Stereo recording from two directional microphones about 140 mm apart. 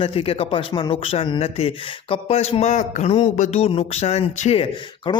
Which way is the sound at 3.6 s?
45° left (ahead or behind).